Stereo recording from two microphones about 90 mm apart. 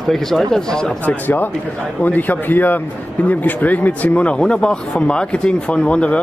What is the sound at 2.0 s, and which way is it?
Speech, 20° left (ahead or behind).